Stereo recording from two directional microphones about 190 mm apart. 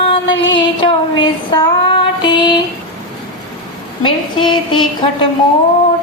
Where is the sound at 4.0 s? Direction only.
25° left (ahead or behind).